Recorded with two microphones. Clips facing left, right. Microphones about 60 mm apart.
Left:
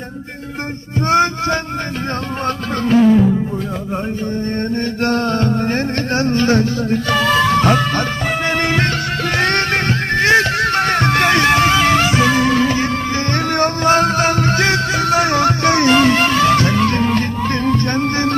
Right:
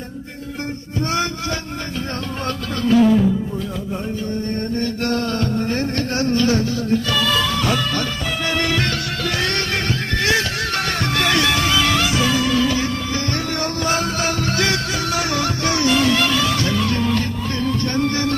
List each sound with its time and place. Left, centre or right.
1.1 s music: left
2.8 s music: left
4.5 s music: left
9.4 s music: left